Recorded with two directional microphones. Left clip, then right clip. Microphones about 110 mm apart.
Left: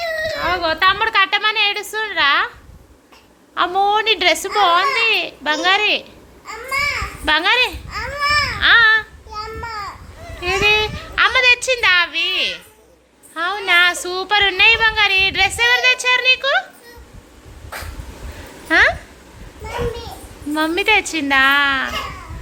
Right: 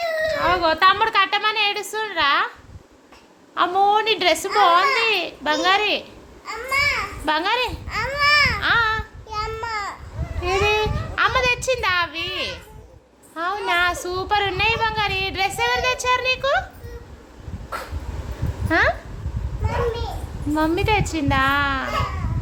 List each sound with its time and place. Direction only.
0.4 s speech: 25° right (ahead or behind)
1.0 s a woman's voice: centre (ahead or behind)
3.5 s a woman's voice: centre (ahead or behind)
4.9 s babbling: 15° right (ahead or behind)
7.9 s baby cry: 90° right; by 8.6 s 70° right (ahead or behind)
8.6 s a sound: 5° right (ahead or behind)
9.3 s a sound: 60° right (ahead or behind)
10.4 s a sound: 15° right (ahead or behind)
13.3 s a woman's voice: 5° right (ahead or behind)
18.7 s a woman's voice: centre (ahead or behind)
20.5 s a woman's voice: centre (ahead or behind)